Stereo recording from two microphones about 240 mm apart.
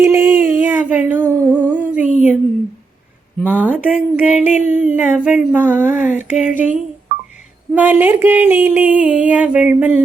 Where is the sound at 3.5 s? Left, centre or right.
Centre.